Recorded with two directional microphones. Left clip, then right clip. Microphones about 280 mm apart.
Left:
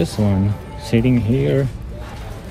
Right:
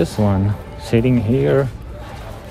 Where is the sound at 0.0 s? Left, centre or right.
Centre.